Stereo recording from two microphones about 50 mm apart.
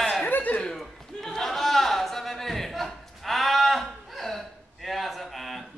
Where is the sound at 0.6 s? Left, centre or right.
Centre.